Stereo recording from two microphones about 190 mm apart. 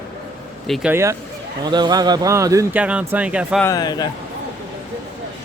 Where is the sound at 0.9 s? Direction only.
15° right (ahead or behind).